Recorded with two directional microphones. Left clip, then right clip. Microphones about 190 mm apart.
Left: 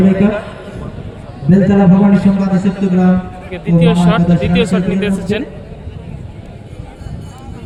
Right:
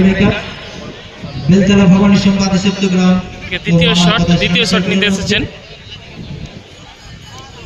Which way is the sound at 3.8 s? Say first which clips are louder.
Right 1 dB; 5° left (ahead or behind).